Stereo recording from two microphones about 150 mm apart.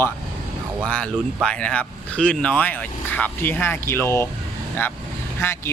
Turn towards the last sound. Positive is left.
turn(degrees=15)  # may be behind; listen again after turning